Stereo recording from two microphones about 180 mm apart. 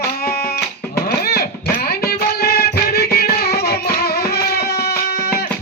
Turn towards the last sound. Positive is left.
turn(degrees=60)  # may be behind; listen again after turning